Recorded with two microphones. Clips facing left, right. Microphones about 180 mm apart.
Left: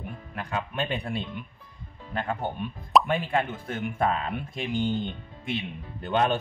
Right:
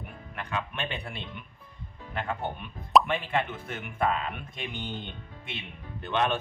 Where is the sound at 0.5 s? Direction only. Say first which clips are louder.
Left 4 dB; 40° left (ahead or behind).